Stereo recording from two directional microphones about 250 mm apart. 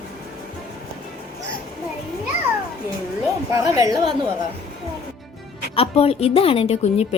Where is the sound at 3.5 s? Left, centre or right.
Centre.